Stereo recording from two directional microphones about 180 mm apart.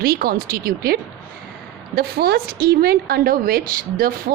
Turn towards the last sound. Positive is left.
turn(degrees=-50)  # may be behind; listen again after turning